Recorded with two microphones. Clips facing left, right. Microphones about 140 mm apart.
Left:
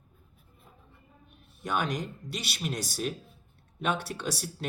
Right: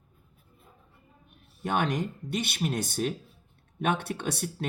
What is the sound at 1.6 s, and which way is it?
Speech, 25° right (ahead or behind).